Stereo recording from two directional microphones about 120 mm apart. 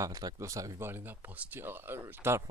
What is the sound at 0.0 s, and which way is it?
Speech, 30° right (ahead or behind).